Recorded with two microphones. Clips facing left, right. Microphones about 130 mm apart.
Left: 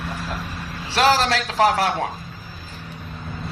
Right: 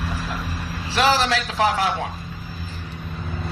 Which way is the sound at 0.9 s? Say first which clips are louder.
Left 1 dB; 40° left (ahead or behind).